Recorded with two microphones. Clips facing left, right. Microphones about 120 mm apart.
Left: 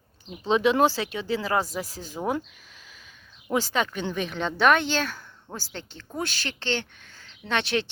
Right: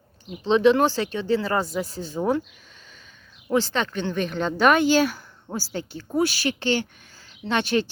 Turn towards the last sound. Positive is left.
turn(degrees=0)  # may be behind; listen again after turning